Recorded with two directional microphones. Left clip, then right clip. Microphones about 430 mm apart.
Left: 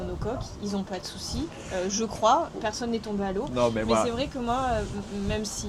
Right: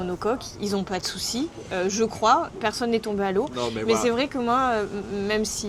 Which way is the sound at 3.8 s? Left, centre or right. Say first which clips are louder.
Right 3 dB; right.